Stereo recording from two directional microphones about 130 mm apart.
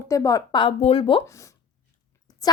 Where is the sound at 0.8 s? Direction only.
45° left (ahead or behind).